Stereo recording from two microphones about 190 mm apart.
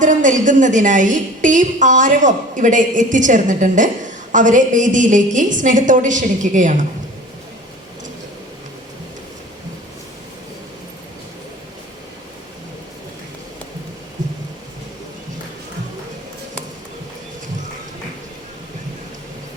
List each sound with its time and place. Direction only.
0.0 s a woman's voice: 40° right (ahead or behind)